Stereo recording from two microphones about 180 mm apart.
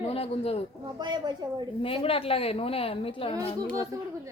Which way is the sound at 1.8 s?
30° left (ahead or behind).